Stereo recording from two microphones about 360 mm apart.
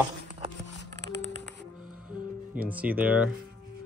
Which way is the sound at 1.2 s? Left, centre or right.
Right.